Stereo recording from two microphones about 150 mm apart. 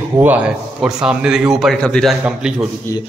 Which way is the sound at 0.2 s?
10° right (ahead or behind).